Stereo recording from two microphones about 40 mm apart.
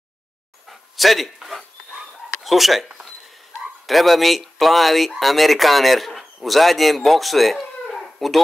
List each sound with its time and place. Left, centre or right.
0.7 s dog: centre
2.4 s speech: centre